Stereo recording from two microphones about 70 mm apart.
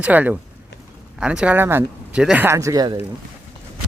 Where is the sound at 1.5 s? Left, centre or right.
Right.